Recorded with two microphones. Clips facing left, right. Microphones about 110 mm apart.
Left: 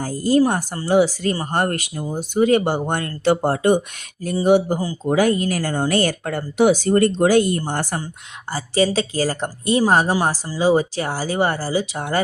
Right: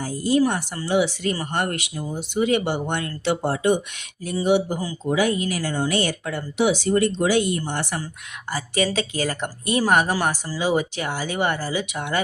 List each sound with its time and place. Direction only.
0.0 s a woman's voice: 45° left (ahead or behind)
8.4 s a woman's voice: 30° left (ahead or behind)